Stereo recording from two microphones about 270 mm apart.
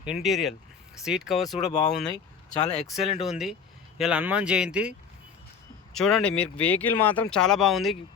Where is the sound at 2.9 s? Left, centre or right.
Centre.